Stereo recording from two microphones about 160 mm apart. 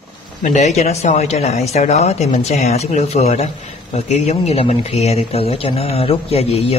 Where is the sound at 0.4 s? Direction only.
50° left (ahead or behind).